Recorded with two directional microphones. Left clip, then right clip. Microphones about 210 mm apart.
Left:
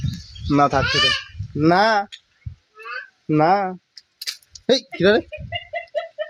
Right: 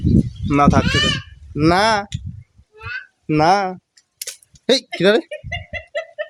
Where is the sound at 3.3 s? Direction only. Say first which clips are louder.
Right 2 dB; 25° right (ahead or behind).